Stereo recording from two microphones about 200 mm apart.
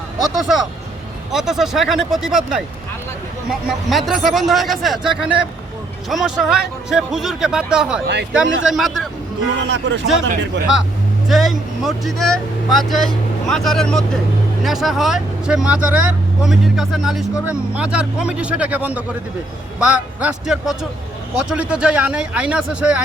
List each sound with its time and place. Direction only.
0.2 s speech: centre (ahead or behind)
3.8 s speech: centre (ahead or behind)
8.0 s speech: 60° right (ahead or behind)
8.3 s speech: 5° right (ahead or behind)
9.6 s speech: 60° right (ahead or behind)
11.3 s speech: centre (ahead or behind)